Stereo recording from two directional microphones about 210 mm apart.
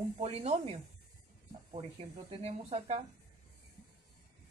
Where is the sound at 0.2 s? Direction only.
30° right (ahead or behind).